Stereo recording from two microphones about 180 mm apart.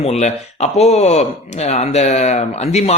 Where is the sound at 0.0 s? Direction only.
40° left (ahead or behind).